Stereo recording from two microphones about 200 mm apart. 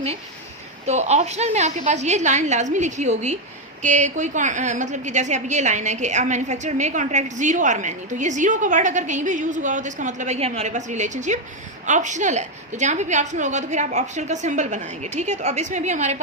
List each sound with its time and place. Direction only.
0.9 s a woman's voice: 35° right (ahead or behind)